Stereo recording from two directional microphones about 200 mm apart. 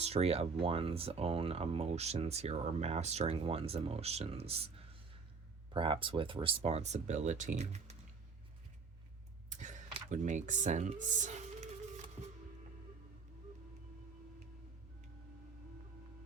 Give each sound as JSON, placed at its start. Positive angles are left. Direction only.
{"t": 0.0, "sound": "speech", "side_deg": -30}
{"t": 5.7, "sound": "speech", "side_deg": -25}
{"t": 9.5, "sound": "speech", "side_deg": -40}